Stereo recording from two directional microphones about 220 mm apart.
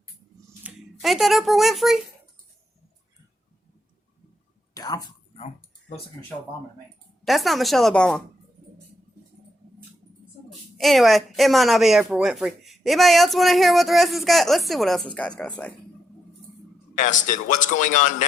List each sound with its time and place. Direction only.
0.6 s speech: 5° right (ahead or behind)
4.7 s a sound: 15° left (ahead or behind)
7.3 s a woman's voice: centre (ahead or behind)
10.8 s a woman's voice: centre (ahead or behind)
17.0 s a man's voice: 35° left (ahead or behind)